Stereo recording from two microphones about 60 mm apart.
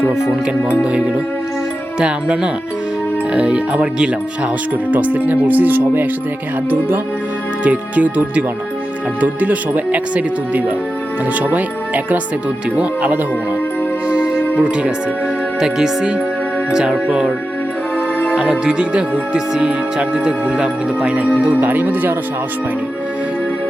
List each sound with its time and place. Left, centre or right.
0.9 s speech: centre; by 6.1 s right
6.7 s music: right
7.6 s speech: right
14.1 s music: centre
14.6 s speech: centre
18.6 s speech: centre
21.5 s speech: right